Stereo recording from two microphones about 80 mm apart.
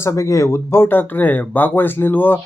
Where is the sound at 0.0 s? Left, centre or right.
Left.